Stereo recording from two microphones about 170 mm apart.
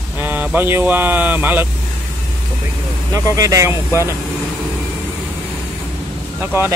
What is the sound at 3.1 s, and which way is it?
Speech, 20° right (ahead or behind).